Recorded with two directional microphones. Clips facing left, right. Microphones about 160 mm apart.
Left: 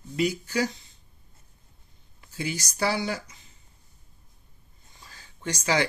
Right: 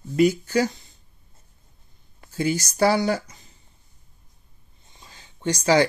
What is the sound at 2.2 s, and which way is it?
Speech, 45° right (ahead or behind).